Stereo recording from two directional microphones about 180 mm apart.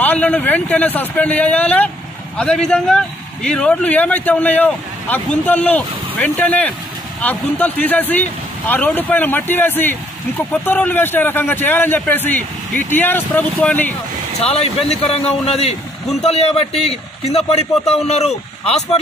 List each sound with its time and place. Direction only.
0.0 s speech: 10° left (ahead or behind)
14.4 s a man's voice: 35° left (ahead or behind)